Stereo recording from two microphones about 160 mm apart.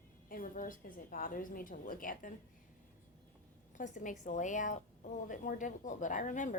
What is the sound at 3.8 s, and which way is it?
A woman's voice, 55° left (ahead or behind).